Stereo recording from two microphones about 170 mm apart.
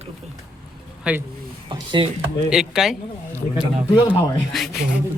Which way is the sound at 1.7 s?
30° right (ahead or behind).